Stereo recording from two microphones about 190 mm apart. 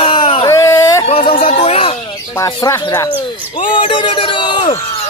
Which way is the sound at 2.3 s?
15° left (ahead or behind).